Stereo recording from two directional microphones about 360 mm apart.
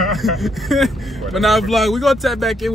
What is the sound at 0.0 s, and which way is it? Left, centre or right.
A man's voice, centre.